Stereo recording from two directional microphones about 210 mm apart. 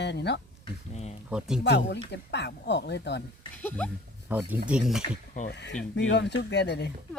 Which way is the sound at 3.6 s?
10° left (ahead or behind).